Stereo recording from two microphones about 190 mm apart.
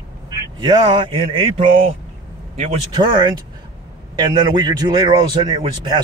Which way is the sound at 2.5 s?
35° right (ahead or behind).